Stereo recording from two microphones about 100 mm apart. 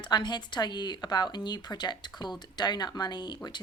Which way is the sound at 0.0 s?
50° left (ahead or behind).